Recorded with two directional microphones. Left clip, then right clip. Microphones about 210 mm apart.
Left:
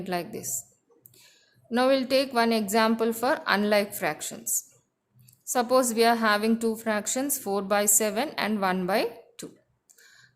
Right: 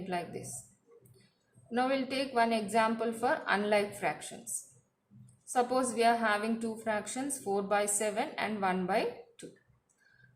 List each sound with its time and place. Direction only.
1.7 s a woman's voice: 50° left (ahead or behind)
5.5 s a woman's voice: 50° left (ahead or behind)